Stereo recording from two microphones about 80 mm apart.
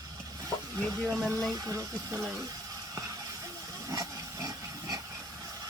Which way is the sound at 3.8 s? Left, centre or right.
Right.